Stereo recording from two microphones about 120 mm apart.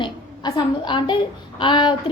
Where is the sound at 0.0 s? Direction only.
40° left (ahead or behind).